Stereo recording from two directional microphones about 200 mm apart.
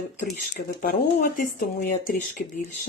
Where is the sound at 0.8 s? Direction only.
40° left (ahead or behind).